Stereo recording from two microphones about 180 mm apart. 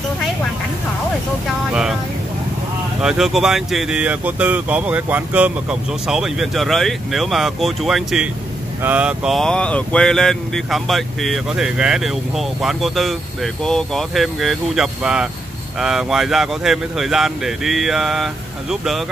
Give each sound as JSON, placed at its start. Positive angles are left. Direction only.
{"t": 1.7, "sound": "vehicle", "side_deg": -5}
{"t": 3.0, "sound": "speech", "side_deg": -5}